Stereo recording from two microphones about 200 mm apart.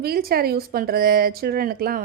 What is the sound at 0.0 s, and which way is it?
Speech, 50° right (ahead or behind).